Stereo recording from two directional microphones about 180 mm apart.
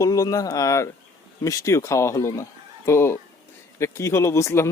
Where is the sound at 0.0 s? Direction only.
20° left (ahead or behind).